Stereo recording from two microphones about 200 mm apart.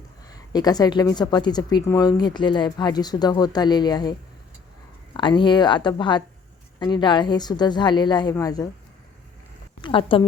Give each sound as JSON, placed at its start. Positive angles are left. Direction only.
{"t": 0.3, "sound": "a woman's voice", "side_deg": 20}
{"t": 5.1, "sound": "a woman's voice", "side_deg": 25}
{"t": 9.8, "sound": "a woman's voice", "side_deg": 25}